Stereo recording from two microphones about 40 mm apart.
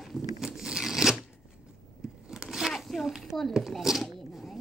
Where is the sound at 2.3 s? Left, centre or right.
Centre.